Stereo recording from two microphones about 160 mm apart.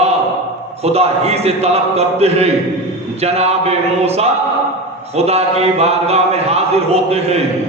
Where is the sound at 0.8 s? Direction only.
40° right (ahead or behind).